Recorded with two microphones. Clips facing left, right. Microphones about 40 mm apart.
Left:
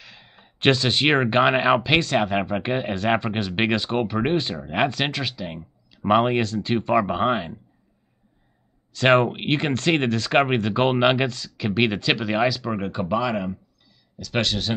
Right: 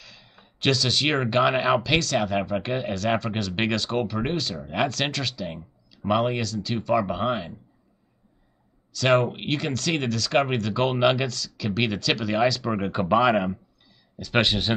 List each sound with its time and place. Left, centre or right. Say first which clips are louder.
0.0 s speech: left 2 dB; left
8.9 s speech: left 3 dB; left; by 12.6 s centre
12.6 s speech: even; centre
12.9 s speech: right 5 dB; centre
14.1 s speech: right 2 dB; centre